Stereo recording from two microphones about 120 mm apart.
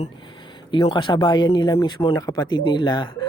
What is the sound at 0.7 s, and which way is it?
Speech, 45° left (ahead or behind).